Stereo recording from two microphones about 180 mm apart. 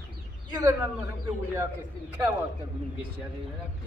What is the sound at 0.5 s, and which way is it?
Speech, 20° right (ahead or behind).